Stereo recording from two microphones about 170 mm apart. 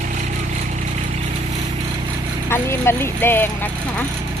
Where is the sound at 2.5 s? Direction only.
15° left (ahead or behind).